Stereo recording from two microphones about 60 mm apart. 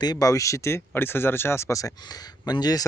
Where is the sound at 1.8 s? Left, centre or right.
Left.